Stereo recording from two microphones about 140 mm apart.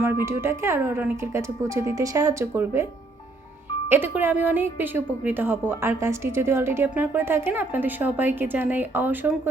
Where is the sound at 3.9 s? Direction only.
15° right (ahead or behind).